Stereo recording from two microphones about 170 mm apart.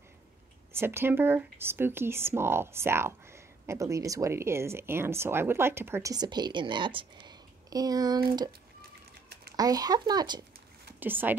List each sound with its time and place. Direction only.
0.7 s speech: 15° right (ahead or behind)
9.6 s speech: 20° right (ahead or behind)
11.0 s speech: 10° right (ahead or behind)